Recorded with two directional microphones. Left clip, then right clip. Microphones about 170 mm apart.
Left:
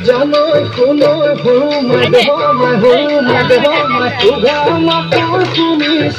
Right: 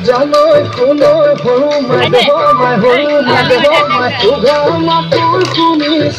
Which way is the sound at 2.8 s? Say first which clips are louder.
Even; 15° left (ahead or behind).